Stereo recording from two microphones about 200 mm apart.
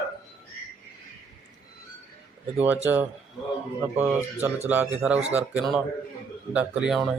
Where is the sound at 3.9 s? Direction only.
5° right (ahead or behind).